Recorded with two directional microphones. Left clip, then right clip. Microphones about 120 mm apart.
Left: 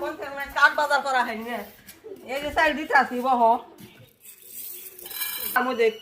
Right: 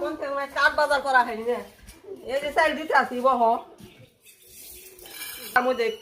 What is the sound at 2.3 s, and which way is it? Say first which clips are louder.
A woman's voice: even; 60° right (ahead or behind).